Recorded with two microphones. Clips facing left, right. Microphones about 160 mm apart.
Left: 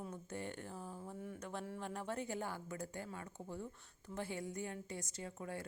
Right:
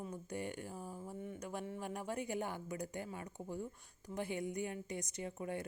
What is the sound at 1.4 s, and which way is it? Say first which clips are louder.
A woman's voice: right 2 dB; 15° right (ahead or behind).